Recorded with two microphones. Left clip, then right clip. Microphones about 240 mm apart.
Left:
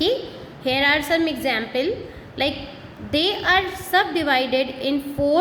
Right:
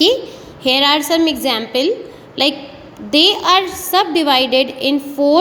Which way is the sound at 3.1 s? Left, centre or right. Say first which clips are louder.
Right 7 dB; right.